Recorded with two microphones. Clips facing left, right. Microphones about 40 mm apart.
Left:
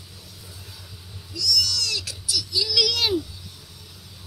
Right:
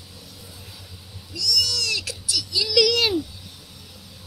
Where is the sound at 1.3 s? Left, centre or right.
Right.